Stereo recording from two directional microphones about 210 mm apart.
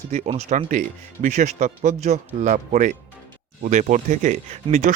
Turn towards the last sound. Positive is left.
turn(degrees=-35)  # may be behind; listen again after turning